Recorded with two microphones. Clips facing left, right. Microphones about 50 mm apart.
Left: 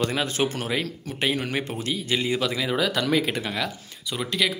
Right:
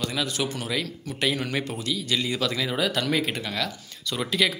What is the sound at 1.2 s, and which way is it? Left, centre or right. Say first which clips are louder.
Speech: left 1 dB; left.